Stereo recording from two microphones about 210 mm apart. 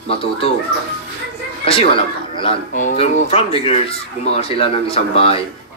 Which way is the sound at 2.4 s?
30° left (ahead or behind).